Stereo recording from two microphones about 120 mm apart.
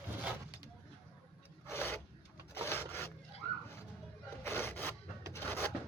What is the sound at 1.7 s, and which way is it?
Filing, 20° left (ahead or behind).